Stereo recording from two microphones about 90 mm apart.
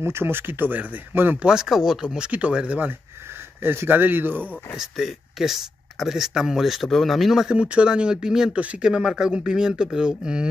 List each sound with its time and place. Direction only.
0.0 s speech: 25° right (ahead or behind)
1.5 s speech: 5° right (ahead or behind); by 4.5 s 20° right (ahead or behind)
4.7 s speech: 5° right (ahead or behind)